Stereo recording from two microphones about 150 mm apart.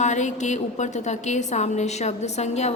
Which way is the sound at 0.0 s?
55° left (ahead or behind).